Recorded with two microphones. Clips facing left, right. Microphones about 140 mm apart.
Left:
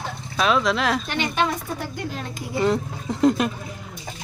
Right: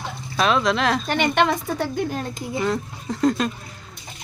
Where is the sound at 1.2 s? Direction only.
75° right (ahead or behind).